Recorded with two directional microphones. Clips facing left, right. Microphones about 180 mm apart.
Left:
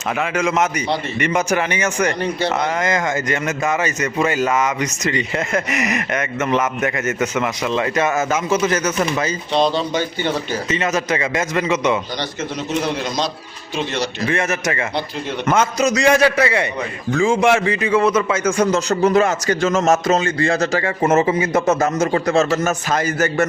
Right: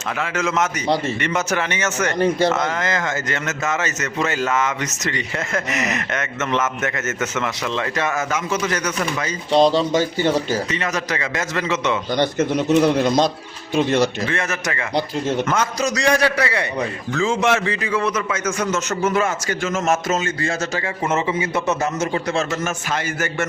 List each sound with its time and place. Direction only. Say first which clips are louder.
0.2 s a man's voice: left 2 dB; 15° left (ahead or behind)
2.1 s a man's voice: right 4 dB; 45° right (ahead or behind)
2.6 s a man's voice: left 3 dB; 15° left (ahead or behind)
9.5 s speech: right 4 dB; 40° right (ahead or behind)
10.7 s a man's voice: left 4 dB; 20° left (ahead or behind)
12.1 s a man's voice: right 6 dB; 55° right (ahead or behind)
14.3 s a man's voice: left 4 dB; 20° left (ahead or behind)
17.2 s a man's voice: left 4 dB; 10° left (ahead or behind); by 23.5 s 40° left (ahead or behind)